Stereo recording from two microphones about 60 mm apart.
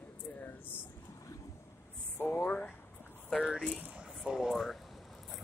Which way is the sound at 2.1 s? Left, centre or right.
Left.